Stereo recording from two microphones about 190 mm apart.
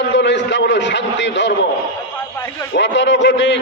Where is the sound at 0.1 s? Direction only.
65° left (ahead or behind).